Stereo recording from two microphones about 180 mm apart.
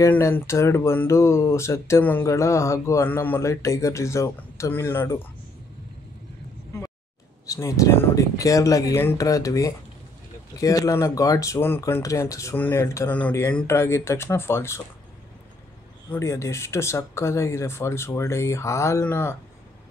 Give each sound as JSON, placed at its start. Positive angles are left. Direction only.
{"t": 0.0, "sound": "speech", "side_deg": 15}
{"t": 7.4, "sound": "speech", "side_deg": 15}
{"t": 16.1, "sound": "speech", "side_deg": 15}